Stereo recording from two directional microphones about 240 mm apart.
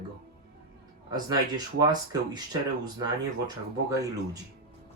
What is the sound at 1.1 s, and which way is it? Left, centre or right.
Speech, centre.